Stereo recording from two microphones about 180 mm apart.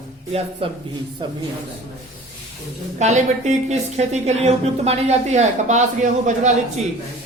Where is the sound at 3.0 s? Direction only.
40° right (ahead or behind).